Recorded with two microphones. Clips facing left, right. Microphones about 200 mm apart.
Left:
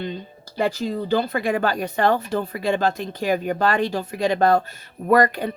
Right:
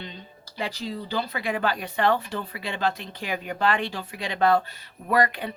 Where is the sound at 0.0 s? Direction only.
50° left (ahead or behind).